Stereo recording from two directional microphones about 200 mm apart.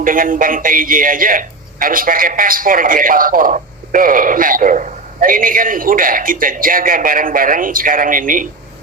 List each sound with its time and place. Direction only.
0.0 s a man's voice: 45° right (ahead or behind)